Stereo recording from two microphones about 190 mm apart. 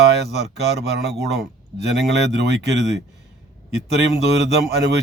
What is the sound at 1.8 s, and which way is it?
Speech, 65° right (ahead or behind).